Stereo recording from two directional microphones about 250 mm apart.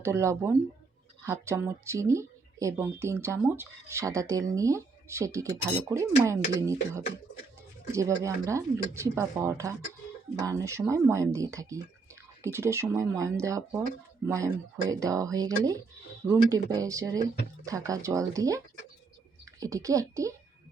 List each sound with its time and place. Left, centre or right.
0.0 s speech: centre
7.9 s speech: centre